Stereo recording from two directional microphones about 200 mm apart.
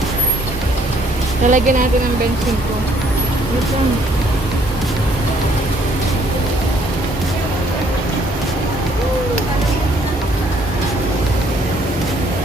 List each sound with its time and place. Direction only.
1.5 s speech: 40° right (ahead or behind)